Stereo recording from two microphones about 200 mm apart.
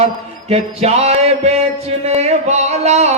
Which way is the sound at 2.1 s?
35° right (ahead or behind).